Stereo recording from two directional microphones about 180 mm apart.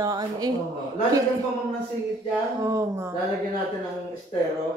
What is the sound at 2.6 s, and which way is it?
Speech, 15° right (ahead or behind).